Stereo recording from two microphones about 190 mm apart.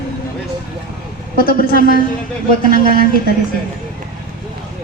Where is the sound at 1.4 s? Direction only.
50° left (ahead or behind).